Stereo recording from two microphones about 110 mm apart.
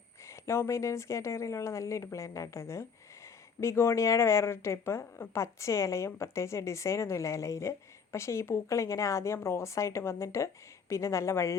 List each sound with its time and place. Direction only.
0.3 s speech: 25° left (ahead or behind)